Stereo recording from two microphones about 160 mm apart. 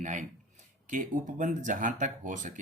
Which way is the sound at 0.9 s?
55° right (ahead or behind).